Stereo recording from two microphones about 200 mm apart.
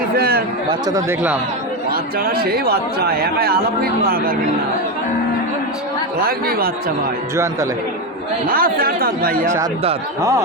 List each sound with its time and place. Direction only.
0.2 s chatter: 50° right (ahead or behind)
1.9 s a man's voice: 50° right (ahead or behind)
6.1 s a man's voice: 50° right (ahead or behind)
7.3 s speech: 15° right (ahead or behind)
8.4 s a man's voice: 45° right (ahead or behind)